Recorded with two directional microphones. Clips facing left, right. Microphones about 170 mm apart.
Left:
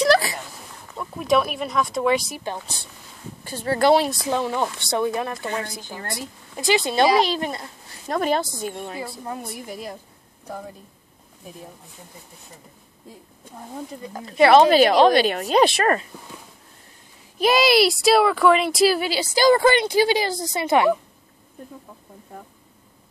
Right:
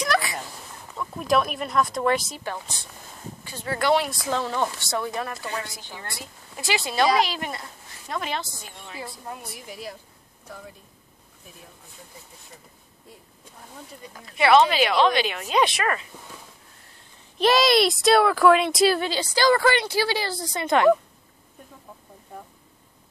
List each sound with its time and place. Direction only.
0.0 s a sound: 30° left (ahead or behind)
1.1 s speech: centre (ahead or behind)
2.3 s a woman's voice: 20° left (ahead or behind)
3.4 s speech: 35° left (ahead or behind)
4.3 s a woman's voice: 15° left (ahead or behind); by 7.6 s 30° left (ahead or behind)
8.1 s a woman's voice: 45° left (ahead or behind)
14.2 s speech: 35° left (ahead or behind)
17.4 s a woman's voice: 5° left (ahead or behind)